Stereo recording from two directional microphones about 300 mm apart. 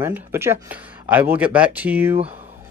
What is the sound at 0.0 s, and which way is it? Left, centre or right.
Speech, centre.